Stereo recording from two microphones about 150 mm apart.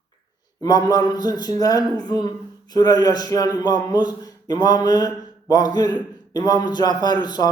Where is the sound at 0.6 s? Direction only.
25° left (ahead or behind).